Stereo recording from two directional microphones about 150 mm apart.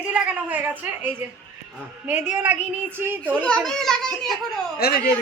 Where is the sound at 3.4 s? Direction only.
5° left (ahead or behind).